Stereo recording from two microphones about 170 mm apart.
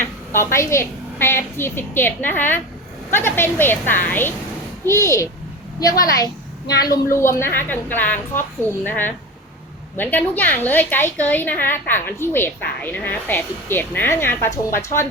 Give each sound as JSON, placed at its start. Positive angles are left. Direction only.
{"t": 0.0, "sound": "a woman's voice", "side_deg": 15}